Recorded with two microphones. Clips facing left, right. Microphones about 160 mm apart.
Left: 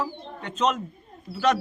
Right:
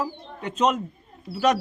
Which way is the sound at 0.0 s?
10° right (ahead or behind).